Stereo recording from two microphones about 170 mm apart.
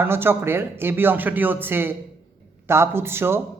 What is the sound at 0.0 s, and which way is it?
Speech, 15° right (ahead or behind).